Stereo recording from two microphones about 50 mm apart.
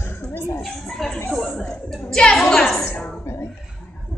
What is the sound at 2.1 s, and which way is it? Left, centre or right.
Speech, centre.